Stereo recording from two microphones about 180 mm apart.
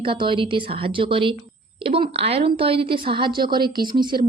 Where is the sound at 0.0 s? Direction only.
30° right (ahead or behind).